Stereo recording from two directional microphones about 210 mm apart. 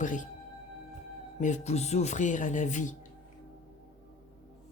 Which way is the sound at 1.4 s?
35° left (ahead or behind).